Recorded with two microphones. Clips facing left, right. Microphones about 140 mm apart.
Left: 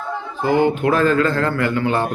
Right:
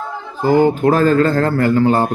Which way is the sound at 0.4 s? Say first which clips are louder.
Right 4 dB; 40° right (ahead or behind).